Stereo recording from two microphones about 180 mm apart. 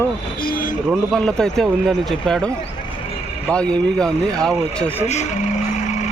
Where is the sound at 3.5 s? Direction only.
5° left (ahead or behind).